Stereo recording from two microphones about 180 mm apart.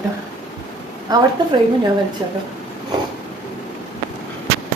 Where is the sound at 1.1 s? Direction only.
20° right (ahead or behind).